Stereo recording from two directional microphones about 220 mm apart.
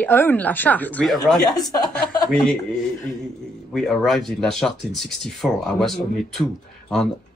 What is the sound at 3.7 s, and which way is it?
Speech, centre (ahead or behind).